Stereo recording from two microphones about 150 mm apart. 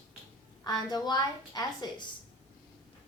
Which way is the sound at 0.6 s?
25° left (ahead or behind).